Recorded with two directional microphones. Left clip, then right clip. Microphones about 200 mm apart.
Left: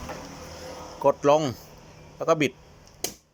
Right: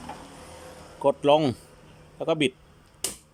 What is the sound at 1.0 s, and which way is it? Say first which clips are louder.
Speech: even; 20° right (ahead or behind).